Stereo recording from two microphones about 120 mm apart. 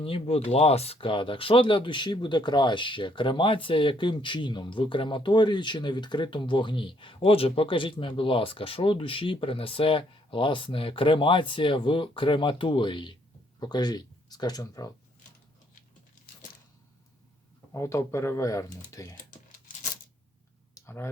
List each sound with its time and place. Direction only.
0.0 s speech: 55° left (ahead or behind); by 14.9 s 30° left (ahead or behind)
17.7 s speech: 25° left (ahead or behind)
20.7 s a sound: 20° left (ahead or behind)